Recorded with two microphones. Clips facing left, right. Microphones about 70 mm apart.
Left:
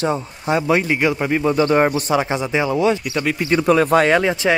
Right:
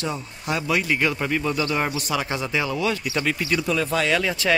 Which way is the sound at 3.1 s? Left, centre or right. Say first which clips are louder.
Left 3 dB; centre.